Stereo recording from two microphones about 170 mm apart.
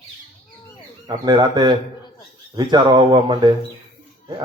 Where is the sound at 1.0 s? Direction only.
25° right (ahead or behind).